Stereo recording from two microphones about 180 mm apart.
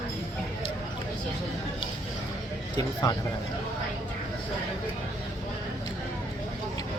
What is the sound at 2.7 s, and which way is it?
Speech, 20° left (ahead or behind).